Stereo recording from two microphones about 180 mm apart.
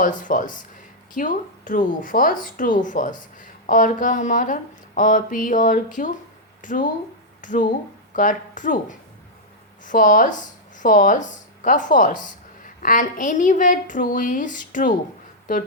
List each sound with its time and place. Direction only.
0.0 s speech: 45° left (ahead or behind)